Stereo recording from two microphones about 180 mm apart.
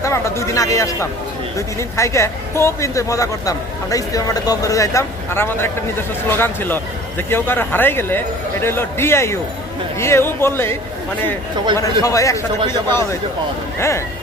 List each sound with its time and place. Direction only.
0.0 s a woman's voice: 15° left (ahead or behind)
13.7 s a woman's voice: 15° left (ahead or behind)